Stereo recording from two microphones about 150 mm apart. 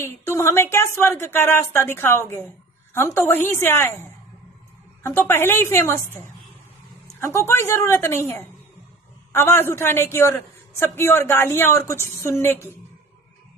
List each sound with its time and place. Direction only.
0.0 s a man's voice: 20° left (ahead or behind)
9.3 s a man's voice: 15° left (ahead or behind)